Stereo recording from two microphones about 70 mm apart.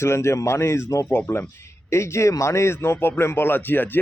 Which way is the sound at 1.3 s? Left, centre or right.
Left.